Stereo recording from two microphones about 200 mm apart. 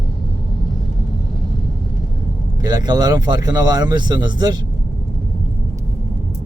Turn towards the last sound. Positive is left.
turn(degrees=-20)  # may be behind; listen again after turning